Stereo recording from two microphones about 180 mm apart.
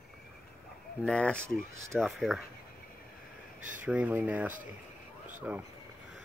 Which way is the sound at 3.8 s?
10° right (ahead or behind).